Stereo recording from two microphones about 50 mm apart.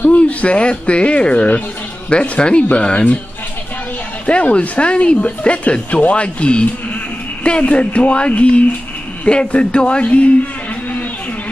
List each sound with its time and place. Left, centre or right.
0.1 s speech: left
4.3 s speech: left